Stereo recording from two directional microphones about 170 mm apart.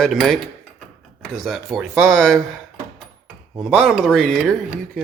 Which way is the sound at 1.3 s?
Centre (ahead or behind).